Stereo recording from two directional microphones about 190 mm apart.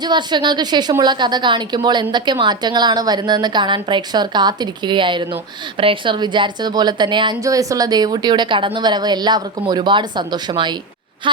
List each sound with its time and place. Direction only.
0.0 s a woman's voice: 25° right (ahead or behind)